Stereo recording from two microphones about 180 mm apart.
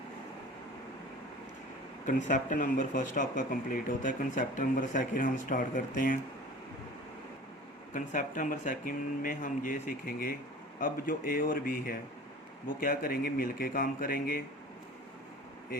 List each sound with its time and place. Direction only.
2.0 s speech: 45° left (ahead or behind)
7.9 s speech: 45° left (ahead or behind)